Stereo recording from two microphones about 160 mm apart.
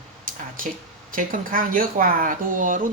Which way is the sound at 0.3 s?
60° right (ahead or behind).